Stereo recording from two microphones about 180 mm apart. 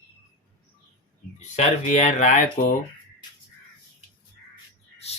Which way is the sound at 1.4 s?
40° left (ahead or behind).